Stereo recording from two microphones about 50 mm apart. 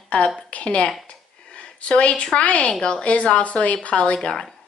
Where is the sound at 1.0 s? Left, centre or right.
Left.